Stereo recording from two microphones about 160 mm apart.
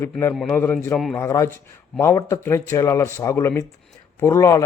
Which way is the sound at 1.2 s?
20° left (ahead or behind).